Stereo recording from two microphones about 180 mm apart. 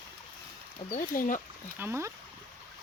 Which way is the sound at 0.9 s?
45° left (ahead or behind).